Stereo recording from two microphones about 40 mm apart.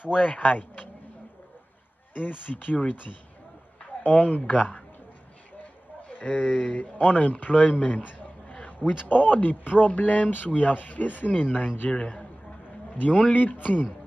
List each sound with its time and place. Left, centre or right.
0.1 s speech: left
2.1 s speech: left
6.0 s speech: left
11.9 s a man's voice: left
12.9 s a man's voice: left